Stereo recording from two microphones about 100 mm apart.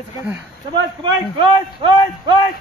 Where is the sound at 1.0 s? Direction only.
50° right (ahead or behind).